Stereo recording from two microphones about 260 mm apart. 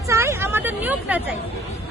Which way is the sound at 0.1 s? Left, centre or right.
Centre.